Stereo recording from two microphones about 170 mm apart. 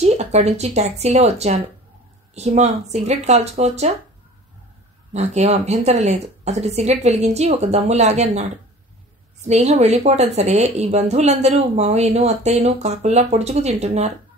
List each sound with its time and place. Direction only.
0.0 s a woman's voice: 40° right (ahead or behind)
5.1 s a woman's voice: 40° right (ahead or behind)